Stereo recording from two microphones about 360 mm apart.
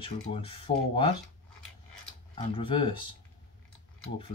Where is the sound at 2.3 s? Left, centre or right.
Centre.